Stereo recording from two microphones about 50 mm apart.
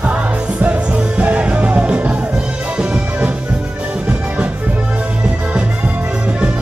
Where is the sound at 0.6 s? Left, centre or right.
Right.